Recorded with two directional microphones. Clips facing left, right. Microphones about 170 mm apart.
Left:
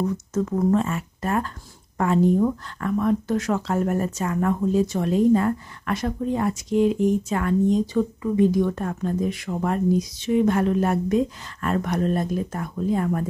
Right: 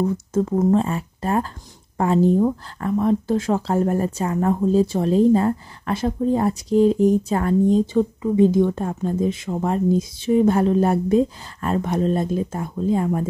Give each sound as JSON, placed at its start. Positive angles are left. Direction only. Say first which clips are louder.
{"t": 0.0, "sound": "speech", "louder": "right 3 dB", "side_deg": -30}